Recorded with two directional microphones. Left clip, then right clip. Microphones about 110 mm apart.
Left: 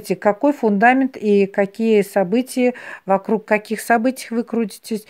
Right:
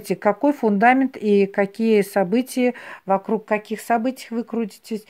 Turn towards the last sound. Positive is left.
turn(degrees=35)  # may be behind; listen again after turning